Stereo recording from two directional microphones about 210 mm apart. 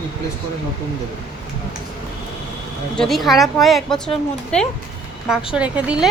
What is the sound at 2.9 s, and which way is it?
A woman's voice, centre (ahead or behind).